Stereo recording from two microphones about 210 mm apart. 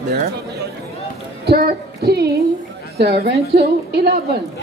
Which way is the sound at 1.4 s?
45° right (ahead or behind).